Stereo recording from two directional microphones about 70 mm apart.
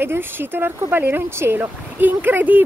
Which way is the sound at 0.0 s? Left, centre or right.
Right.